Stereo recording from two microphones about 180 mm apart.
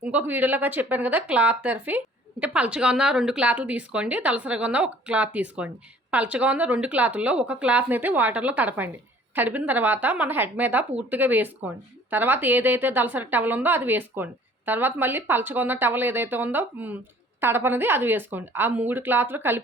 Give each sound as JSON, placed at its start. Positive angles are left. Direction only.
{"t": 0.0, "sound": "a woman's voice", "side_deg": -10}